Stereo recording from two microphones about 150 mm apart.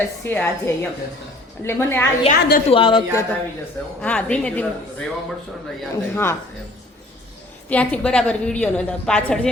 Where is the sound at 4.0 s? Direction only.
10° left (ahead or behind).